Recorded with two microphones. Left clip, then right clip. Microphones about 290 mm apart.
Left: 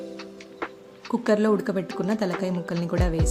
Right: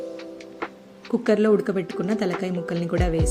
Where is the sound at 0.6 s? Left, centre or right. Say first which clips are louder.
Left 1 dB; centre.